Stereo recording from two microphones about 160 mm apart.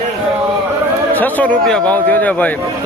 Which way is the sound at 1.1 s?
10° left (ahead or behind).